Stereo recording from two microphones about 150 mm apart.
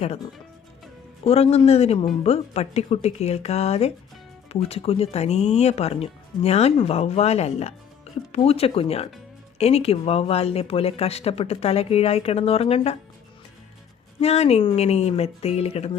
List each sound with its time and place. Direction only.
1.2 s speech: 45° left (ahead or behind)
14.2 s speech: 45° left (ahead or behind)